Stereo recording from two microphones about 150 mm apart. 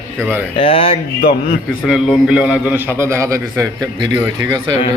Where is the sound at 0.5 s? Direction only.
40° left (ahead or behind).